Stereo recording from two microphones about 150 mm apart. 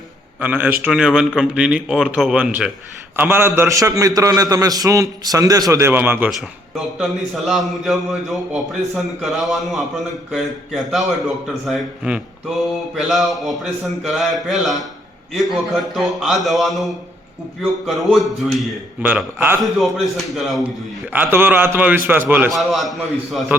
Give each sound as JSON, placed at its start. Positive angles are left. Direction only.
{"t": 0.3, "sound": "a man's voice", "side_deg": -10}
{"t": 6.7, "sound": "speech", "side_deg": 0}
{"t": 19.0, "sound": "a man's voice", "side_deg": -10}
{"t": 19.6, "sound": "speech", "side_deg": 0}
{"t": 21.1, "sound": "a man's voice", "side_deg": -15}
{"t": 22.5, "sound": "speech", "side_deg": 0}